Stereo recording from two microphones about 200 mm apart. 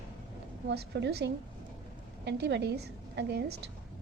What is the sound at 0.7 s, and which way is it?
A woman's voice, 55° right (ahead or behind).